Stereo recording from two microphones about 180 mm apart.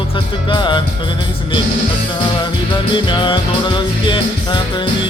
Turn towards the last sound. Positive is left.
turn(degrees=25)  # may be behind; listen again after turning